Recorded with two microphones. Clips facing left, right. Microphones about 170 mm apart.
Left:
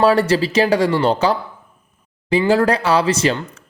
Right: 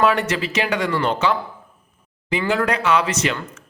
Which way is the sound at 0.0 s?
35° left (ahead or behind).